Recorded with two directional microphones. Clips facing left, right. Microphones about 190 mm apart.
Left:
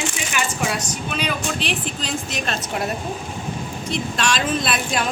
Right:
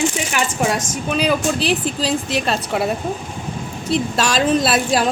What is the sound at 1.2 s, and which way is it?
A woman's voice, 35° right (ahead or behind).